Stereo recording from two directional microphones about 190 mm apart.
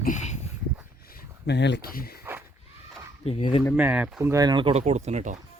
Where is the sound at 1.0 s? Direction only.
55° left (ahead or behind).